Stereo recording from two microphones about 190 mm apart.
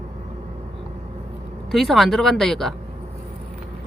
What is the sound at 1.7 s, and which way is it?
Speech, centre (ahead or behind).